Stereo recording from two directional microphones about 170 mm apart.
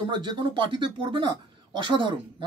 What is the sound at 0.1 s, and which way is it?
Speech, 25° right (ahead or behind).